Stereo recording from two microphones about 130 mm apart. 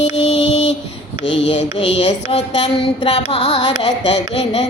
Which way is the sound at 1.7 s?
45° left (ahead or behind).